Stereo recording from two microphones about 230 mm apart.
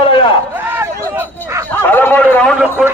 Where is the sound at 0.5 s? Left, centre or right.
Centre.